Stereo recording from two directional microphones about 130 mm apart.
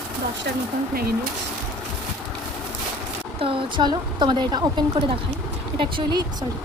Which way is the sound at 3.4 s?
40° right (ahead or behind).